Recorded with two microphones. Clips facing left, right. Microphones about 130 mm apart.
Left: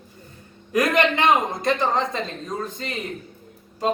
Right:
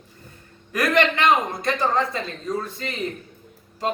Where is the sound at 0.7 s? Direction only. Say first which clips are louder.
Left 1 dB; 20° left (ahead or behind).